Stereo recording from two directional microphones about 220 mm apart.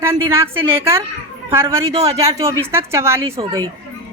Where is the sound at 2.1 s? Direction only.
15° right (ahead or behind).